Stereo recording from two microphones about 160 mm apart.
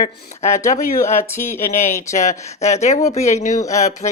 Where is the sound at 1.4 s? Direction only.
15° left (ahead or behind).